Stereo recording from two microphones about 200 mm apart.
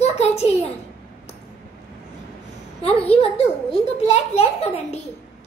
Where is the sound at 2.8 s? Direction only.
30° left (ahead or behind).